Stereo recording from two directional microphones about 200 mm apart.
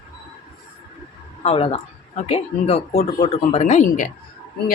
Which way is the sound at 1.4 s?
30° left (ahead or behind).